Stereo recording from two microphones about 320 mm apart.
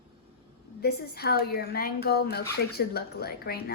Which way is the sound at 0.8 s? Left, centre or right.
Left.